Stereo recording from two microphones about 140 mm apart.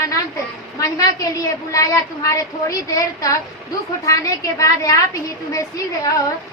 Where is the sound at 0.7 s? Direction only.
25° left (ahead or behind).